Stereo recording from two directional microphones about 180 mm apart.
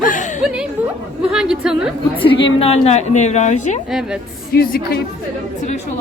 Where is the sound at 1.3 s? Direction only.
5° right (ahead or behind).